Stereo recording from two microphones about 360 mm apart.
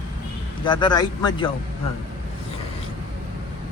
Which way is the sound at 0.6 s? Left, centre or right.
Centre.